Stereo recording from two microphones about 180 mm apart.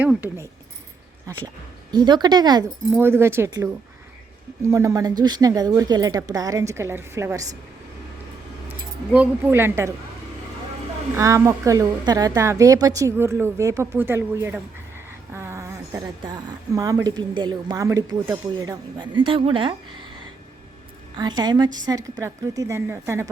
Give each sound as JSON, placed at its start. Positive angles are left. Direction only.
{"t": 0.0, "sound": "a woman's voice", "side_deg": -10}
{"t": 1.9, "sound": "a woman's voice", "side_deg": -25}
{"t": 9.1, "sound": "a woman's voice", "side_deg": -10}
{"t": 11.2, "sound": "a woman's voice", "side_deg": -15}
{"t": 21.2, "sound": "a woman's voice", "side_deg": -25}